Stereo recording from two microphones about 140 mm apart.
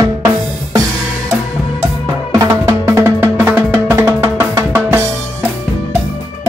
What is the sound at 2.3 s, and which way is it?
Music, 20° right (ahead or behind).